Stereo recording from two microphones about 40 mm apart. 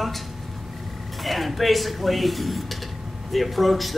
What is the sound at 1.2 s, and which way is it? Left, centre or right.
A man's voice, centre.